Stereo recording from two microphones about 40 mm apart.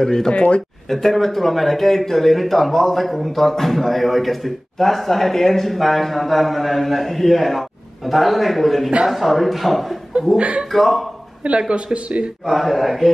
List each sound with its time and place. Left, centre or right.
0.0 s speech: centre
0.3 s speech: left
0.8 s speech: centre
11.7 s speech: right
12.4 s speech: centre